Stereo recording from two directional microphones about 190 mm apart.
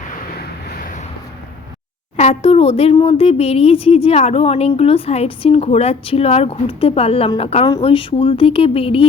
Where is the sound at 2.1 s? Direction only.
35° left (ahead or behind).